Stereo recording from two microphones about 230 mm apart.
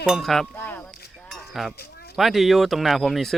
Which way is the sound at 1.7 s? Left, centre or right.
Left.